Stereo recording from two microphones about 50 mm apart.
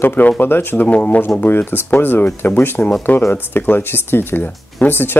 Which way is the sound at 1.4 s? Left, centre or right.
Left.